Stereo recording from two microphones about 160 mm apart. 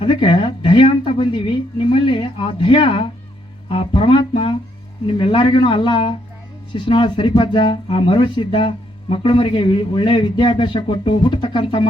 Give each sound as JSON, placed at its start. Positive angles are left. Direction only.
{"t": 0.0, "sound": "a woman's voice", "side_deg": 30}